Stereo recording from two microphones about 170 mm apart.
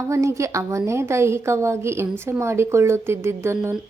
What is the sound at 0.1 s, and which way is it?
A woman's voice, 15° right (ahead or behind).